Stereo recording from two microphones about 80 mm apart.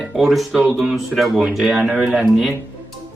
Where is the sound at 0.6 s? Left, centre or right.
Centre.